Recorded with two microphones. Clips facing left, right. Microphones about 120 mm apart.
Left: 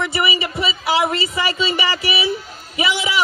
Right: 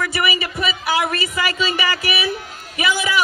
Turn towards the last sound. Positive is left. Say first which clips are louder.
# even
turn(degrees=25)  # may be behind; listen again after turning